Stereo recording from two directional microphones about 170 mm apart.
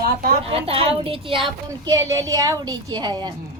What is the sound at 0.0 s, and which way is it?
Speech, 60° right (ahead or behind).